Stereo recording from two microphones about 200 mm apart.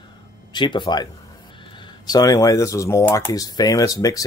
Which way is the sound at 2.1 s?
15° left (ahead or behind).